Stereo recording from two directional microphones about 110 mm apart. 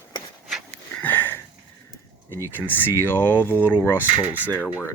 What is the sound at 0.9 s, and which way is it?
Sniff, 15° left (ahead or behind).